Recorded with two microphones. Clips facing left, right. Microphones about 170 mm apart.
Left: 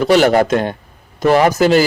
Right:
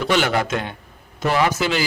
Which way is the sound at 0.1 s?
40° left (ahead or behind).